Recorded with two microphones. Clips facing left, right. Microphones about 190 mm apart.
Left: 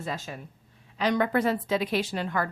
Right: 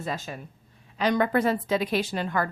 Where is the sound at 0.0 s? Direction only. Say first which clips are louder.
Right 2 dB; 45° right (ahead or behind).